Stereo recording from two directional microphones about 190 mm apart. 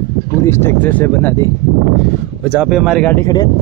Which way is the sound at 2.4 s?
5° right (ahead or behind).